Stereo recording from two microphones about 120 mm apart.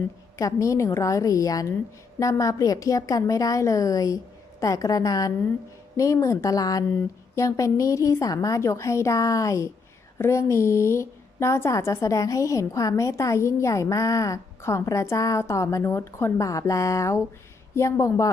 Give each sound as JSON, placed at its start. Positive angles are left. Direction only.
{"t": 0.3, "sound": "a woman's voice", "side_deg": 25}